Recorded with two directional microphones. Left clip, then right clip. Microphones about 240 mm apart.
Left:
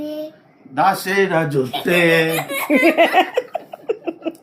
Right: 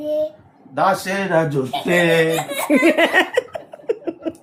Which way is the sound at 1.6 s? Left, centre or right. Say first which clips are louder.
Left 3 dB; left.